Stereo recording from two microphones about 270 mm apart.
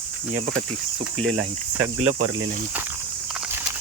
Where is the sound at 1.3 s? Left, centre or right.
Right.